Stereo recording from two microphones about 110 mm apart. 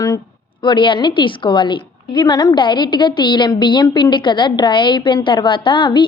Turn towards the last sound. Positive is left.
turn(degrees=45)  # may be behind; listen again after turning